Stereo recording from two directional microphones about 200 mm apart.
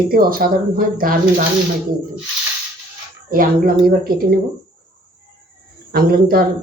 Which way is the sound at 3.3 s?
45° right (ahead or behind).